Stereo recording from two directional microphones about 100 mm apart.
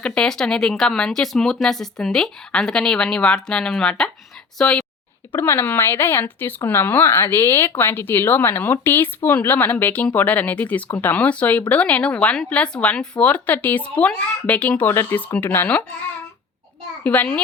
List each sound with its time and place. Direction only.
0.0 s speech: 10° left (ahead or behind)
5.3 s speech: 20° left (ahead or behind)
17.0 s speech: 15° left (ahead or behind)